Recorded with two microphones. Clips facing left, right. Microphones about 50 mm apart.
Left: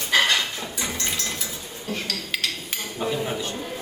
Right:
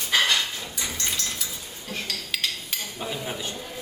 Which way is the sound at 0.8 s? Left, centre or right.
Centre.